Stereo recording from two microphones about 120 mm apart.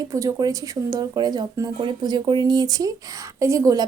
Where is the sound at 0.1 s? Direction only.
30° right (ahead or behind).